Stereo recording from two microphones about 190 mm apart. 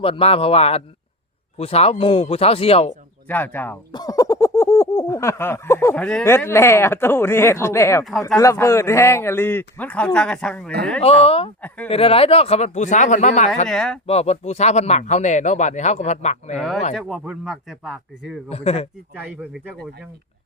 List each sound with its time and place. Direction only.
0.0 s speech: 30° left (ahead or behind)
3.2 s a sound: 10° left (ahead or behind)
11.0 s speech: 30° left (ahead or behind)
13.7 s speech: centre (ahead or behind)
14.1 s speech: 35° left (ahead or behind)
16.6 s speech: centre (ahead or behind)
18.4 s speech: 35° left (ahead or behind)
19.1 s speech: 5° right (ahead or behind)